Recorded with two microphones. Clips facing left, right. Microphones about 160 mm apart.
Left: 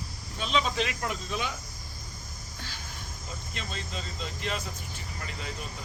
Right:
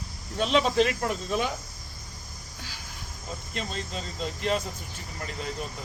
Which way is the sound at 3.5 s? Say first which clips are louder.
Right 5 dB; 45° right (ahead or behind).